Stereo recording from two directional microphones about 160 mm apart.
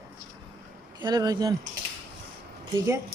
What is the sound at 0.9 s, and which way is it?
Speech, 25° right (ahead or behind).